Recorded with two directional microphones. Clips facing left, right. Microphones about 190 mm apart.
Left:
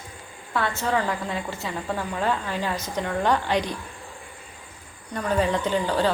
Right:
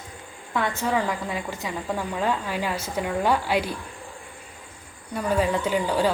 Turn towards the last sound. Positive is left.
turn(degrees=-10)  # may be behind; listen again after turning